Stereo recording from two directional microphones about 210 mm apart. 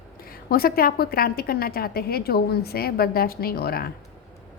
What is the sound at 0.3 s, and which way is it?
A woman's voice, 45° left (ahead or behind).